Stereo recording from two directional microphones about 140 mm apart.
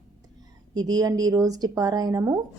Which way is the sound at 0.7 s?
25° right (ahead or behind).